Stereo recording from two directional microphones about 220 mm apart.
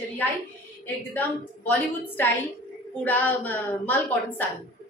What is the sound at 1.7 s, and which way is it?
A woman's voice, 10° left (ahead or behind).